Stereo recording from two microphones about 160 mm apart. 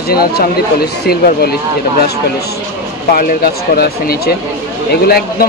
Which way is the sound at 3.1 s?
65° left (ahead or behind).